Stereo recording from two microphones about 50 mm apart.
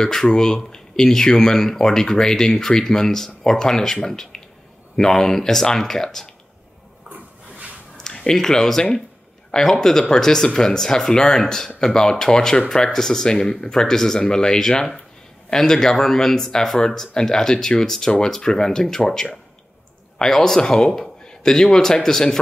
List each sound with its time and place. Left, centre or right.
0.0 s speech: centre
7.1 s toilet flush: right
8.0 s speech: centre